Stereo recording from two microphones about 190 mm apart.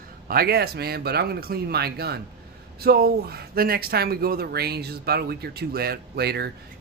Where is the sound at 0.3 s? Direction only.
50° right (ahead or behind).